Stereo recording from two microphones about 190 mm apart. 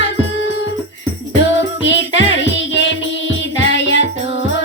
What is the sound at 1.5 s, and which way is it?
Music, 75° left (ahead or behind).